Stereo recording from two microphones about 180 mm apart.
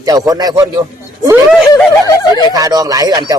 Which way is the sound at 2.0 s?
25° left (ahead or behind).